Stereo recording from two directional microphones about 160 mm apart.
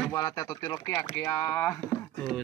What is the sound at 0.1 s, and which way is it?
Speech, 25° left (ahead or behind).